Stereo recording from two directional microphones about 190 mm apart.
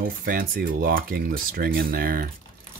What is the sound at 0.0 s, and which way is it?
Speech, 50° right (ahead or behind).